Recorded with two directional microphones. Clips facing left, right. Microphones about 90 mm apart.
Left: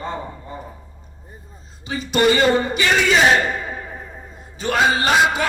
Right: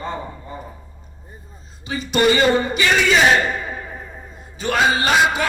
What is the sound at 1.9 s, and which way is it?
A man's voice, 35° left (ahead or behind).